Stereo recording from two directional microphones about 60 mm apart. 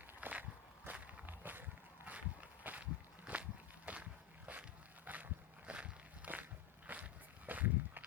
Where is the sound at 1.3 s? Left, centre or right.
Right.